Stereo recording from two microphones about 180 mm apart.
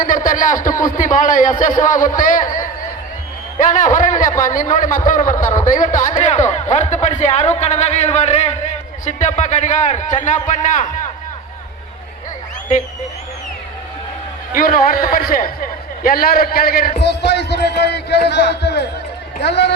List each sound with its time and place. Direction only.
0.0 s a man's voice: 45° left (ahead or behind)
3.6 s a man's voice: 45° left (ahead or behind)
14.5 s a man's voice: 50° left (ahead or behind); by 19.7 s 70° left (ahead or behind)